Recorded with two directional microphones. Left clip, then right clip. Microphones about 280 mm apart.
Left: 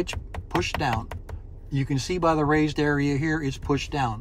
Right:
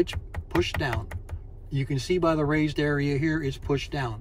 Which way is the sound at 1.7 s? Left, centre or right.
Centre.